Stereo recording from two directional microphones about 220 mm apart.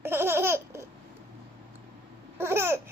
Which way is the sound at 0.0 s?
10° right (ahead or behind).